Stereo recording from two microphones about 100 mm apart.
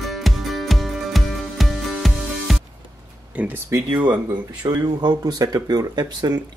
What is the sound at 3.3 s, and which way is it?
Speech, 15° right (ahead or behind).